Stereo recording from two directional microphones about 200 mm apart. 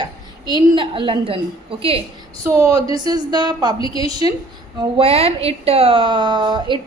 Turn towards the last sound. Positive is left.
turn(degrees=-25)  # may be behind; listen again after turning